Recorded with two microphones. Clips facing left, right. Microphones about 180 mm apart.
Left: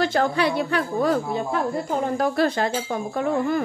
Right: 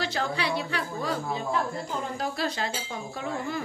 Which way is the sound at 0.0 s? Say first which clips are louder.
Left 8 dB; 50° left (ahead or behind).